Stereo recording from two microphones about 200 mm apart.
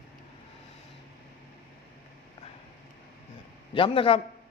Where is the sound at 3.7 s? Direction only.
25° left (ahead or behind).